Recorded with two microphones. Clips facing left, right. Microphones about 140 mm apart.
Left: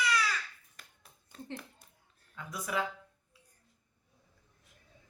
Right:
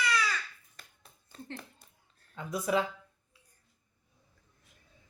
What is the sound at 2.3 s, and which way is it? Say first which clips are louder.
Speech: right 6 dB; 25° right (ahead or behind).